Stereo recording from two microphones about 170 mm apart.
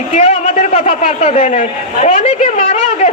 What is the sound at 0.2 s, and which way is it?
A woman's voice, 40° left (ahead or behind).